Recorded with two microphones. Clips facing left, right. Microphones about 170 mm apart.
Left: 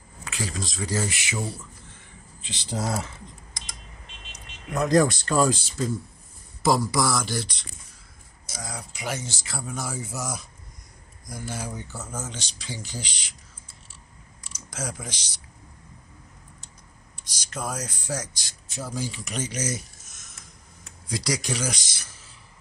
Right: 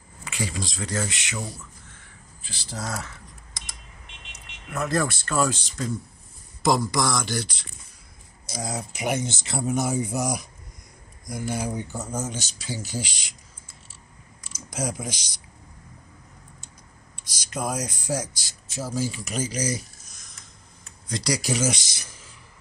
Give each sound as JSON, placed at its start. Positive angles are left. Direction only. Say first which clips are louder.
{"t": 0.2, "sound": "speech", "louder": "right 1 dB", "side_deg": 0}
{"t": 2.4, "sound": "speech", "louder": "left 5 dB", "side_deg": 20}
{"t": 4.7, "sound": "speech", "louder": "left 5 dB", "side_deg": 15}
{"t": 8.6, "sound": "speech", "louder": "right 5 dB", "side_deg": -20}
{"t": 14.5, "sound": "speech", "louder": "right 5 dB", "side_deg": -10}
{"t": 17.5, "sound": "speech", "louder": "right 4 dB", "side_deg": -10}